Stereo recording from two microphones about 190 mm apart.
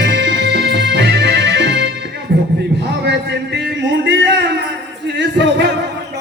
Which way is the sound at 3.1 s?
65° right (ahead or behind).